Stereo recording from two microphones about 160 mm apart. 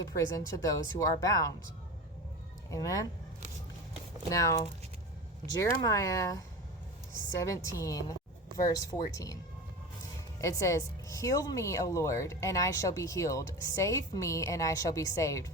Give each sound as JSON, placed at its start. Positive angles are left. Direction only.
{"t": 0.0, "sound": "speech", "side_deg": 20}
{"t": 2.6, "sound": "speech", "side_deg": 20}
{"t": 4.3, "sound": "speech", "side_deg": 20}
{"t": 10.4, "sound": "speech", "side_deg": 20}